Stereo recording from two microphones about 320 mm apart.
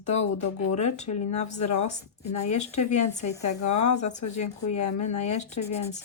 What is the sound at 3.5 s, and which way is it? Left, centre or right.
Speech, left.